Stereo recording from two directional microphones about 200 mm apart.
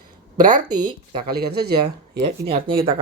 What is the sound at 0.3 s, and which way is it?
Speech, 40° right (ahead or behind).